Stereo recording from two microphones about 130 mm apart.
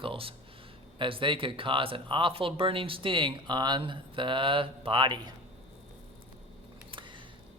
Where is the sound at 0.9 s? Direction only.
40° right (ahead or behind).